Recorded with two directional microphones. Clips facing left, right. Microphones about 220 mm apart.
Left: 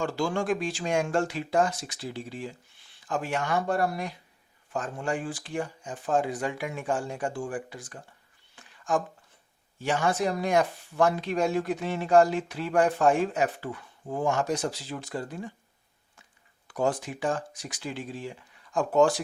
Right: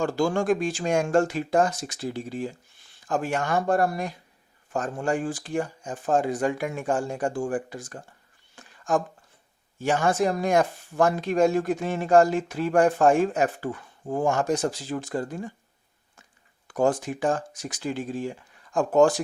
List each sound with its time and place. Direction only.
0.0 s speech: 45° right (ahead or behind)
8.5 s a sound: 45° right (ahead or behind)
9.7 s speech: 45° right (ahead or behind)
16.6 s speech: 45° right (ahead or behind)